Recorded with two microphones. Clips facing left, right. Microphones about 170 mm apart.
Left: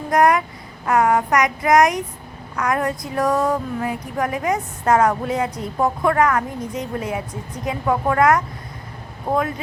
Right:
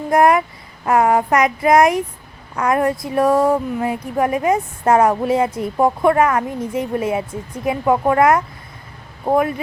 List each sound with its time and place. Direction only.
0.1 s speech: 25° right (ahead or behind)